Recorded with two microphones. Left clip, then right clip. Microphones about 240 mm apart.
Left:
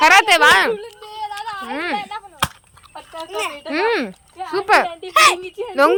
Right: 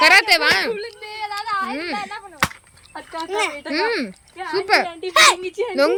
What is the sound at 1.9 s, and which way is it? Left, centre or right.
Whip, left.